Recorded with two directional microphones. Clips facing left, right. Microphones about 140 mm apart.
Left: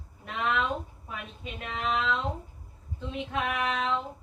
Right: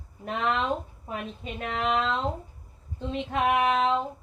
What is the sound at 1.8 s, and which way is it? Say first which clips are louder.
Female singing: right 3 dB; 40° right (ahead or behind).